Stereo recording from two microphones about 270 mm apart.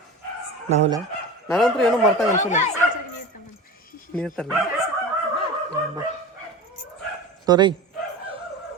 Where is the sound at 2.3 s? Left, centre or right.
Left.